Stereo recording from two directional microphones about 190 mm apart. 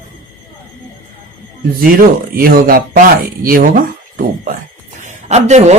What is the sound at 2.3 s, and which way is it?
Speech, 50° right (ahead or behind).